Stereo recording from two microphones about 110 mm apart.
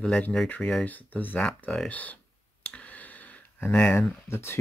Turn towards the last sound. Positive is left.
turn(degrees=25)  # may be behind; listen again after turning